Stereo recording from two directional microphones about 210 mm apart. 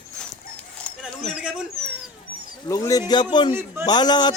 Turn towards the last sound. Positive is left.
turn(degrees=20)  # may be behind; listen again after turning